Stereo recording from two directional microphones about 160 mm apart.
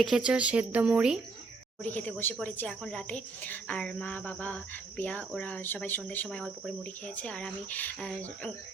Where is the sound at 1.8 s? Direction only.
10° left (ahead or behind).